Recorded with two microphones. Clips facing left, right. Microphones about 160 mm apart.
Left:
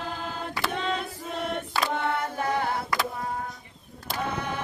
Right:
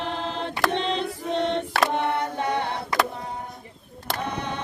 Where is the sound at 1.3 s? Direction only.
25° right (ahead or behind).